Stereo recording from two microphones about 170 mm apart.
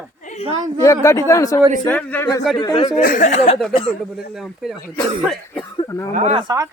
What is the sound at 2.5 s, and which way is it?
Speech, 30° left (ahead or behind).